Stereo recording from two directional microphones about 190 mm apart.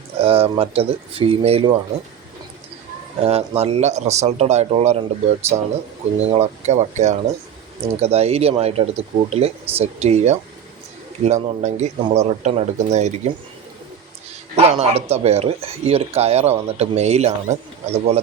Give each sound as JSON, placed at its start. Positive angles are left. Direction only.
{"t": 0.2, "sound": "speech", "side_deg": -30}
{"t": 3.2, "sound": "speech", "side_deg": -30}
{"t": 6.1, "sound": "speech", "side_deg": -30}
{"t": 14.5, "sound": "speech", "side_deg": -35}